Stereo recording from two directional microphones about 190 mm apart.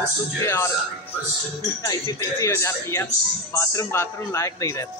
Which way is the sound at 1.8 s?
15° left (ahead or behind).